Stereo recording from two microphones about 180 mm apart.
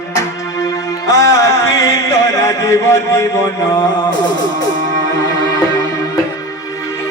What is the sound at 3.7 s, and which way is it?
Music, 20° left (ahead or behind).